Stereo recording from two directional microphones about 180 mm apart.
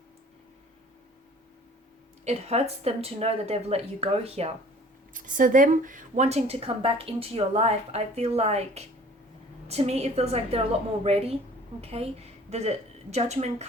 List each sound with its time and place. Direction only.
2.2 s a woman's voice: 35° right (ahead or behind)
5.1 s a woman's voice: 45° right (ahead or behind)